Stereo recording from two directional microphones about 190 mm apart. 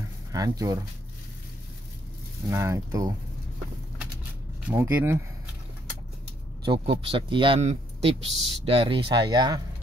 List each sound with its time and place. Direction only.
0.3 s speech: 20° right (ahead or behind)
2.5 s speech: 15° right (ahead or behind)
4.6 s speech: 10° right (ahead or behind)
6.6 s speech: 25° right (ahead or behind)